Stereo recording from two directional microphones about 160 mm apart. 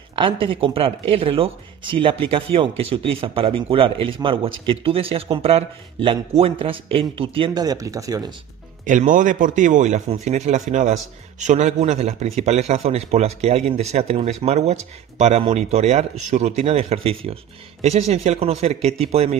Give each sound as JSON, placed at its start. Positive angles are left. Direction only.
{"t": 0.2, "sound": "speech", "side_deg": -35}
{"t": 8.8, "sound": "a man's voice", "side_deg": -55}